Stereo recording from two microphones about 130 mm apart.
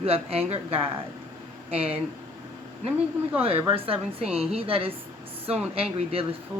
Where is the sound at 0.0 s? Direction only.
50° right (ahead or behind).